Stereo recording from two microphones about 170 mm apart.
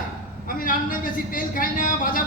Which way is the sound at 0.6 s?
55° left (ahead or behind).